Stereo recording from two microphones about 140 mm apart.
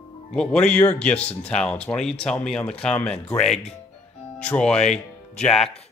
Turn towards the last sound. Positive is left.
turn(degrees=5)  # may be behind; listen again after turning